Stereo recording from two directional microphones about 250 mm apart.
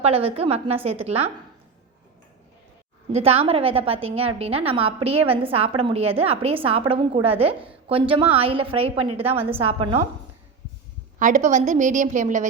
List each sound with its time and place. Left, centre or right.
0.0 s a woman's voice: right
3.1 s a woman's voice: right
11.2 s a woman's voice: right